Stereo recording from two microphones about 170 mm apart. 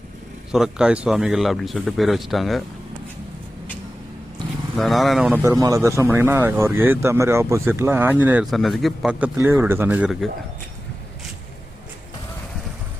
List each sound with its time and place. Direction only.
0.5 s speech: 5° right (ahead or behind)
4.4 s vehicle: centre (ahead or behind)
5.4 s speech: 20° right (ahead or behind)